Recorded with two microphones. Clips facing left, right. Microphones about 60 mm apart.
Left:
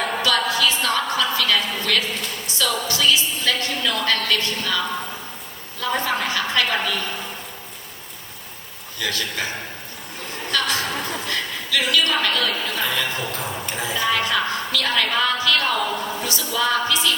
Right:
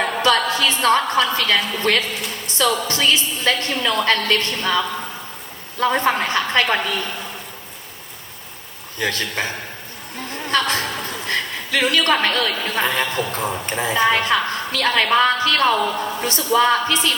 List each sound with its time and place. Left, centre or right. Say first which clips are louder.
0.0 s a woman's voice: right 3 dB; right
5.8 s a woman's voice: right 5 dB; right
9.0 s a woman's voice: right 3 dB; right
10.5 s a woman's voice: right 3 dB; right